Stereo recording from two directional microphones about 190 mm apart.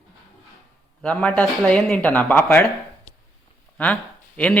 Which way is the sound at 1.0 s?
5° left (ahead or behind).